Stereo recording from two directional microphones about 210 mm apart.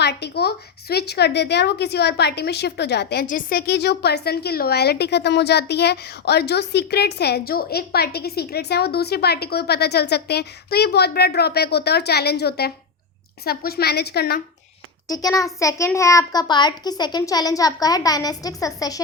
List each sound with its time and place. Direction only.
0.0 s a woman's voice: 50° left (ahead or behind)
15.0 s a child's voice: 15° left (ahead or behind)